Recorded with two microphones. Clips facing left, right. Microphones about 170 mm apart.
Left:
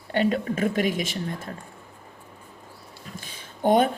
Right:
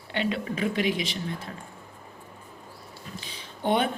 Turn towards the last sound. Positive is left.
turn(degrees=45)  # may be behind; listen again after turning